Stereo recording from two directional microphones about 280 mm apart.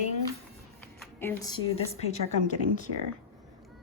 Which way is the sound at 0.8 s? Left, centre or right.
Centre.